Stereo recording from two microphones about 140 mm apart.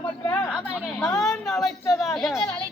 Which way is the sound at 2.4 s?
15° left (ahead or behind).